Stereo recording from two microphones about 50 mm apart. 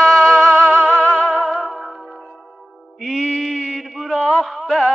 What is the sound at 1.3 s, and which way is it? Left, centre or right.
Music, centre.